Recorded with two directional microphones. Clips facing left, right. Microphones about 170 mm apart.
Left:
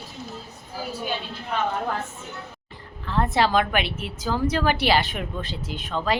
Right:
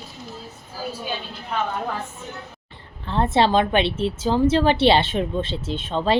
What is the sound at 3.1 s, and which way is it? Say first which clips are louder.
A woman's voice: right 3 dB; 25° right (ahead or behind).